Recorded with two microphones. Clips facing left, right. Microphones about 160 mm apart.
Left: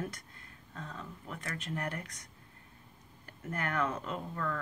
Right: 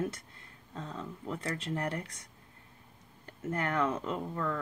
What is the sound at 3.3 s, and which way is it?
Speech, 25° right (ahead or behind).